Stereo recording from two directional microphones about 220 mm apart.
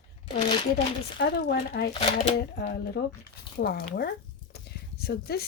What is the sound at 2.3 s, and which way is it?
Speech, 50° left (ahead or behind).